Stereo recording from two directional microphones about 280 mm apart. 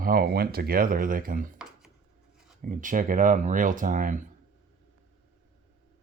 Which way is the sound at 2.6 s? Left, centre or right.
Right.